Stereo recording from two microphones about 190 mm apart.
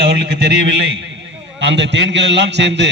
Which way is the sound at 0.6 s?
65° right (ahead or behind).